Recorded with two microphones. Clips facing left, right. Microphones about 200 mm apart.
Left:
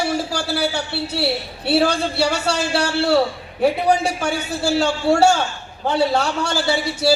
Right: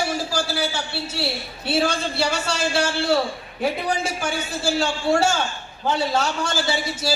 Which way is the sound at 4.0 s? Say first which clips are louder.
Left 4 dB; 65° left (ahead or behind).